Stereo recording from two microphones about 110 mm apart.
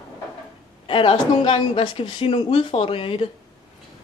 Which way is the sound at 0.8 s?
55° left (ahead or behind).